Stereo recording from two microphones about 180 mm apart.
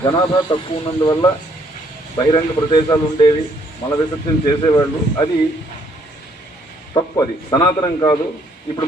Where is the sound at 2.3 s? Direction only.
25° left (ahead or behind).